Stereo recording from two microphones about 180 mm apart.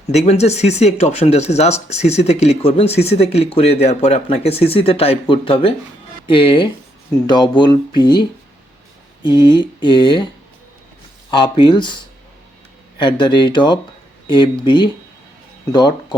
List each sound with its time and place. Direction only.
0.1 s speech: 40° left (ahead or behind)
11.3 s speech: 25° left (ahead or behind)
13.0 s speech: 25° left (ahead or behind)